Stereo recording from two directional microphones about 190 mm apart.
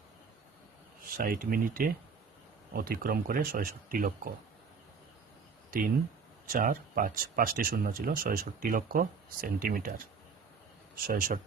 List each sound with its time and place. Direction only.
1.1 s speech: 50° right (ahead or behind)
6.5 s speech: 45° right (ahead or behind)
10.9 s speech: 50° right (ahead or behind)